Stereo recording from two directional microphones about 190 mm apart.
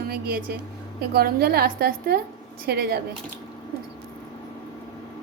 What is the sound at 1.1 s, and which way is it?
A woman's voice, 55° right (ahead or behind).